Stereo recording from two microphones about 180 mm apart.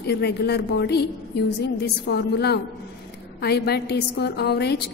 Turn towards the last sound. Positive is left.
turn(degrees=65)  # may be behind; listen again after turning